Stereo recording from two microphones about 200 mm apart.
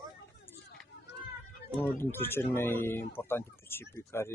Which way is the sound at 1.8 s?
10° left (ahead or behind).